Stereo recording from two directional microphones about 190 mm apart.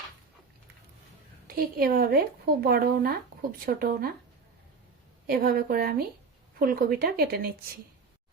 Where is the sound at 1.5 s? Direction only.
50° right (ahead or behind).